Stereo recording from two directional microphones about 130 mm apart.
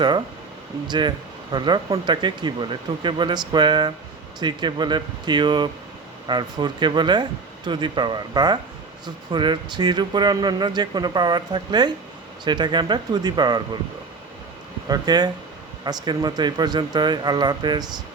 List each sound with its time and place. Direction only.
0.9 s speech: 35° right (ahead or behind)
14.8 s speech: 30° right (ahead or behind)